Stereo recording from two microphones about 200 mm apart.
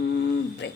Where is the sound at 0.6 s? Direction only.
65° left (ahead or behind).